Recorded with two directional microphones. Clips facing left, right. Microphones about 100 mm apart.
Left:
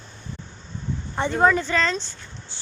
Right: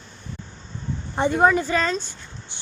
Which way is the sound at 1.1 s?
15° right (ahead or behind).